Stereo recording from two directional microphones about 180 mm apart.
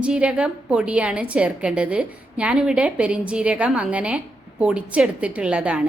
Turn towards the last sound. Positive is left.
turn(degrees=-5)  # may be behind; listen again after turning